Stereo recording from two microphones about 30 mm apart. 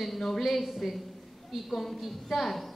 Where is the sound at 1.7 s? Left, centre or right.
Centre.